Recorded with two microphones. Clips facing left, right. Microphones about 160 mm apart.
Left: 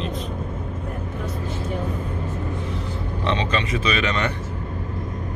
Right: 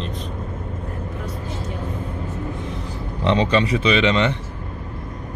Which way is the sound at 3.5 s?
30° right (ahead or behind).